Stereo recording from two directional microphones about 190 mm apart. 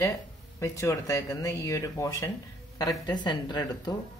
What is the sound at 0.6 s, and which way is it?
Speech, 15° left (ahead or behind).